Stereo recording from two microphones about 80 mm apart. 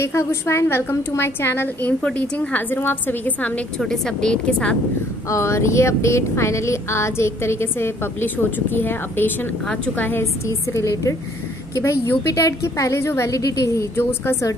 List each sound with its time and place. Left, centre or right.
0.0 s a woman's voice: left
3.8 s a woman's voice: centre
5.3 s a woman's voice: left
10.7 s speech: left